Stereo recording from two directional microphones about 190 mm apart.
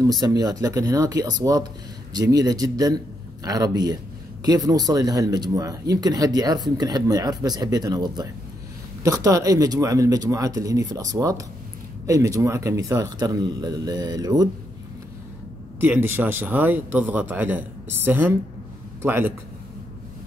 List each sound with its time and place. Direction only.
0.2 s speech: 20° right (ahead or behind)
15.8 s speech: 10° right (ahead or behind)